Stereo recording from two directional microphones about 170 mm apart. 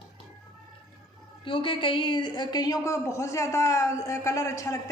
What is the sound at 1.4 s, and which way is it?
A woman's voice, 30° left (ahead or behind).